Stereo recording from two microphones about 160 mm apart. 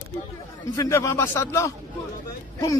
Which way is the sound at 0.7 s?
20° left (ahead or behind).